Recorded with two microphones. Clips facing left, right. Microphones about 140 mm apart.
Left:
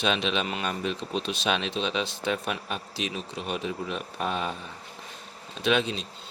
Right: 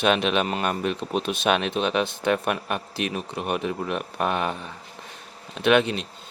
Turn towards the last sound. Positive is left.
turn(degrees=-60)  # may be behind; listen again after turning